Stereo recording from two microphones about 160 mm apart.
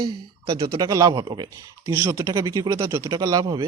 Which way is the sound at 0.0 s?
25° right (ahead or behind).